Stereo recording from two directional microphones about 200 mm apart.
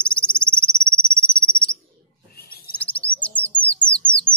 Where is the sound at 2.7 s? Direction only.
5° left (ahead or behind).